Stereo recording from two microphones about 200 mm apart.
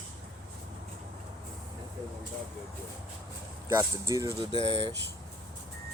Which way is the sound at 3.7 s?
15° right (ahead or behind).